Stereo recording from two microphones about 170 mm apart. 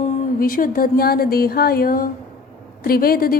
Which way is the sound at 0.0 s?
55° left (ahead or behind).